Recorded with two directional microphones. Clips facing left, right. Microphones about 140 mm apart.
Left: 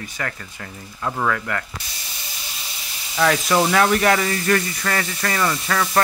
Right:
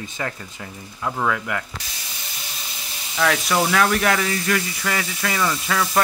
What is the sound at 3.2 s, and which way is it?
Speech, 5° left (ahead or behind).